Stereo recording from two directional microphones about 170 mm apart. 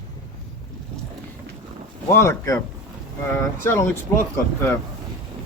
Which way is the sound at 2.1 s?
15° left (ahead or behind).